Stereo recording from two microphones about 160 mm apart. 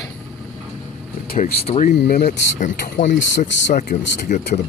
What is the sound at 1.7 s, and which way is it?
Speech, 50° left (ahead or behind).